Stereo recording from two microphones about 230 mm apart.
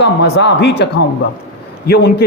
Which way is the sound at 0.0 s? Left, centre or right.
Left.